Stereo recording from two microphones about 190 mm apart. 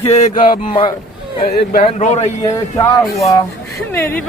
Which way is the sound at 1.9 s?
35° left (ahead or behind).